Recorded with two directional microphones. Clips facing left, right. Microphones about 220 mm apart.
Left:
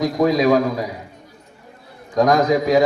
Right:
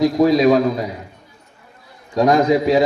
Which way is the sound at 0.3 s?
25° right (ahead or behind).